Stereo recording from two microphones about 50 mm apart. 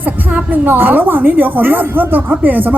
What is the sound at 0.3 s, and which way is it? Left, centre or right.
A woman's voice, right.